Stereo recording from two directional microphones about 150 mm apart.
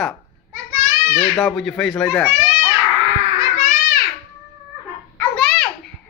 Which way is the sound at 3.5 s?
65° left (ahead or behind).